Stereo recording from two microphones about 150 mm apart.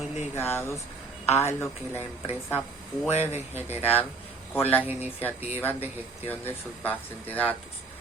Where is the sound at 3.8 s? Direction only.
10° left (ahead or behind).